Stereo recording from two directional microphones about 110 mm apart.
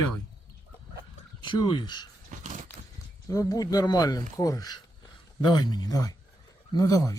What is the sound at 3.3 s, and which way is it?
Speech, 30° left (ahead or behind).